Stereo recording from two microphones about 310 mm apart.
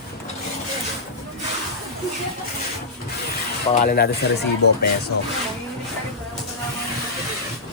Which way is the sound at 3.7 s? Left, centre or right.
Left.